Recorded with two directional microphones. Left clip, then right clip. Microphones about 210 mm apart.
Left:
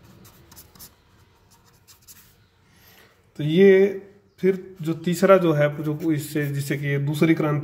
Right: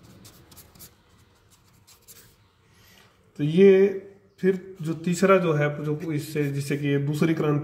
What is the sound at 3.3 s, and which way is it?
Speech, 20° left (ahead or behind).